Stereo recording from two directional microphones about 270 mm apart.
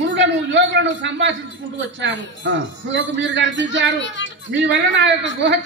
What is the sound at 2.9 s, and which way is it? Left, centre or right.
A man's voice, right.